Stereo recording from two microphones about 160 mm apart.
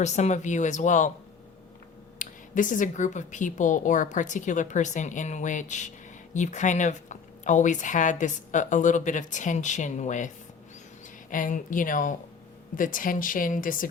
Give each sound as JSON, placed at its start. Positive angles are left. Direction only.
{"t": 0.0, "sound": "speech", "side_deg": 45}
{"t": 2.1, "sound": "speech", "side_deg": 55}